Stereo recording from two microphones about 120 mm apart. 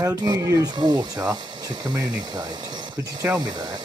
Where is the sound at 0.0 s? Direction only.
30° right (ahead or behind).